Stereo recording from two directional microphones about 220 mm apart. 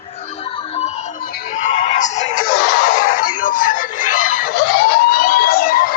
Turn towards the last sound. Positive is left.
turn(degrees=40)  # may be behind; listen again after turning